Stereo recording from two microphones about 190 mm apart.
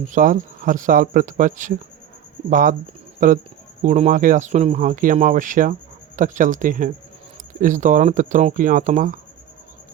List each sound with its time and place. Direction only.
0.1 s speech: 45° right (ahead or behind)